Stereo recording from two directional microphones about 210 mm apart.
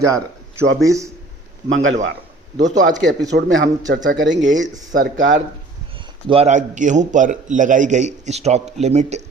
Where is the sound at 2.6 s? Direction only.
35° right (ahead or behind).